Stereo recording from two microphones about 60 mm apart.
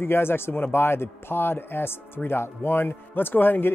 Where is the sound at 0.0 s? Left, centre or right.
Left.